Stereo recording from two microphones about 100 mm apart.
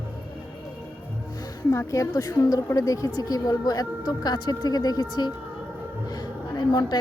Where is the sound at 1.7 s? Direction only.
30° left (ahead or behind).